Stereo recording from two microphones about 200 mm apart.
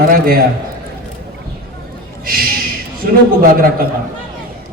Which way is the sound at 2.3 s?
50° right (ahead or behind).